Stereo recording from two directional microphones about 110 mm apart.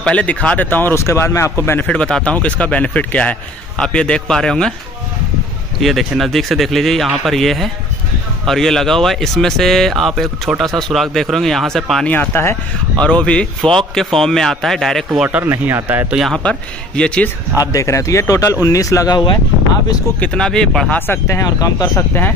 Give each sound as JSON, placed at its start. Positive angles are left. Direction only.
{"t": 0.0, "sound": "a man's voice", "side_deg": 10}
{"t": 1.9, "sound": "a man's voice", "side_deg": 10}
{"t": 5.8, "sound": "speech", "side_deg": 0}
{"t": 12.1, "sound": "a man's voice", "side_deg": 15}
{"t": 15.2, "sound": "speech", "side_deg": -20}
{"t": 16.1, "sound": "speech", "side_deg": -5}
{"t": 16.4, "sound": "a man's voice", "side_deg": 10}
{"t": 17.7, "sound": "speech", "side_deg": 30}
{"t": 20.2, "sound": "a man's voice", "side_deg": 10}
{"t": 21.1, "sound": "speech", "side_deg": 25}